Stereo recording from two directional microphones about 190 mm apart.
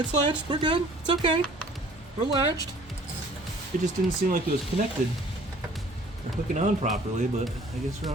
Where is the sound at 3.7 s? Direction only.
40° right (ahead or behind).